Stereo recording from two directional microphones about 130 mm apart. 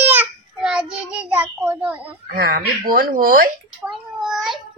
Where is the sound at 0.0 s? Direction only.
15° right (ahead or behind).